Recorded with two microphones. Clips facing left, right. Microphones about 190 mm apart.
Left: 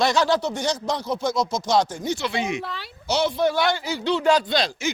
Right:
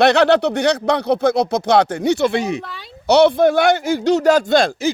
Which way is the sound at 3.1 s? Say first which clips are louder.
Right 10 dB; 65° right (ahead or behind).